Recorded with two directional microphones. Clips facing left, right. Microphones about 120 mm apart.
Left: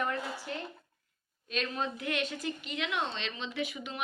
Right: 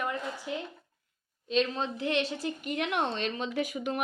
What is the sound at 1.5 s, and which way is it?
A woman's voice, 30° right (ahead or behind).